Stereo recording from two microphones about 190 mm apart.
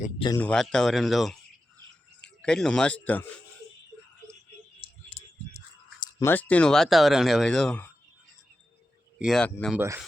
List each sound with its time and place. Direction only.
0.3 s speech: 5° left (ahead or behind)
4.8 s a sound: 35° left (ahead or behind)
6.0 s speech: 15° left (ahead or behind)
9.1 s speech: centre (ahead or behind)
9.7 s speech: 15° right (ahead or behind)